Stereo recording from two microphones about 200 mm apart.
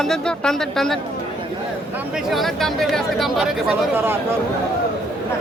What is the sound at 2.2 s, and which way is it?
Speech, centre (ahead or behind).